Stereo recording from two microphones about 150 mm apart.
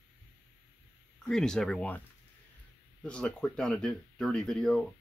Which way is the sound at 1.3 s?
5° left (ahead or behind).